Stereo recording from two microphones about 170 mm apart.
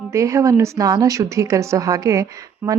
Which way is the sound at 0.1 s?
15° right (ahead or behind).